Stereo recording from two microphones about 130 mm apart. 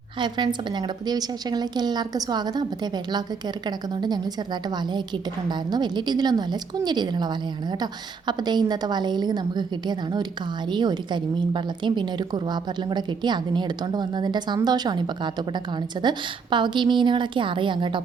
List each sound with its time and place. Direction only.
0.2 s a woman's voice: 35° right (ahead or behind)